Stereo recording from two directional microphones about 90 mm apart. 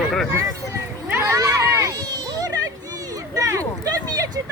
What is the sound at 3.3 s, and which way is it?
Speech, 40° right (ahead or behind).